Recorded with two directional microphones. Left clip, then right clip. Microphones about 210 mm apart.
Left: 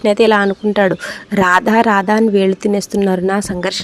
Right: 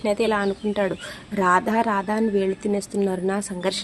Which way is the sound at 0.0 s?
40° left (ahead or behind).